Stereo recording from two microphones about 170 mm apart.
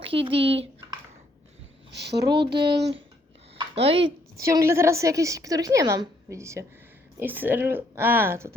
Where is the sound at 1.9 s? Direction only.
80° right.